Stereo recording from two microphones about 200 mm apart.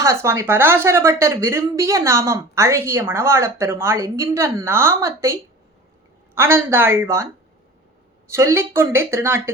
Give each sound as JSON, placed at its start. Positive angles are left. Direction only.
{"t": 0.0, "sound": "speech", "side_deg": -15}
{"t": 8.3, "sound": "speech", "side_deg": -15}